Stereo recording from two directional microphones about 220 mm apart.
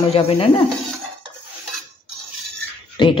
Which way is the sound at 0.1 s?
25° left (ahead or behind).